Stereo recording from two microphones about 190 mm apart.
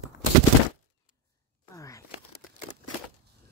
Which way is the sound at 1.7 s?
15° left (ahead or behind).